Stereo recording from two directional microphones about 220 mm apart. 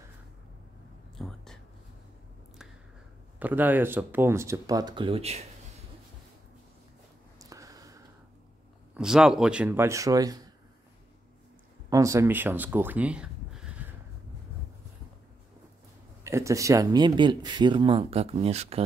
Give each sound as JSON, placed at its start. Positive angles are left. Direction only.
{"t": 1.1, "sound": "whispering", "side_deg": 0}
{"t": 3.3, "sound": "speech", "side_deg": -10}
{"t": 7.3, "sound": "a sound", "side_deg": -15}
{"t": 8.9, "sound": "speech", "side_deg": -5}
{"t": 11.9, "sound": "speech", "side_deg": -15}
{"t": 16.3, "sound": "speech", "side_deg": -15}